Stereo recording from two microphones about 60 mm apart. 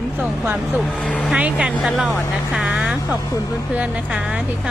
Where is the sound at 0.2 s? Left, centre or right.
Right.